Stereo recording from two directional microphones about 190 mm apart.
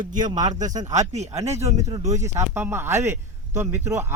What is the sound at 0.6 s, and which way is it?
Speech, 40° right (ahead or behind).